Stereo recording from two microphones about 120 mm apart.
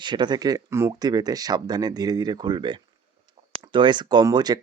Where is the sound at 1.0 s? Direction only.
35° right (ahead or behind).